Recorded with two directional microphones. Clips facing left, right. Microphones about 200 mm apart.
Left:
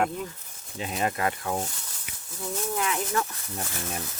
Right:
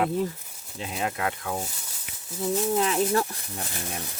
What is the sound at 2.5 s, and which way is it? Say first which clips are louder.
Speech: right 5 dB; 30° right (ahead or behind).